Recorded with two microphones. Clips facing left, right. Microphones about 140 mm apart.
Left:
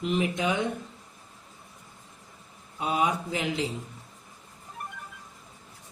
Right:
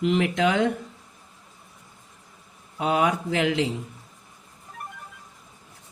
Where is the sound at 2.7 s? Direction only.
90° right.